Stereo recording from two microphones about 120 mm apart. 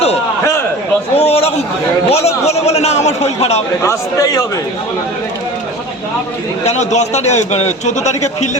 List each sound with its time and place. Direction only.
1.1 s a man's voice: 55° left (ahead or behind)
3.8 s speech: 30° left (ahead or behind)
6.7 s a man's voice: 70° left (ahead or behind)